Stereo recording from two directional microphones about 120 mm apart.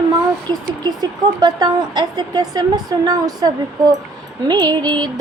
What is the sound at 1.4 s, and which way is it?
Female singing, 35° right (ahead or behind).